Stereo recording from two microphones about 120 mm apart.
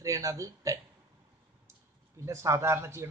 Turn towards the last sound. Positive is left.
turn(degrees=-20)  # may be behind; listen again after turning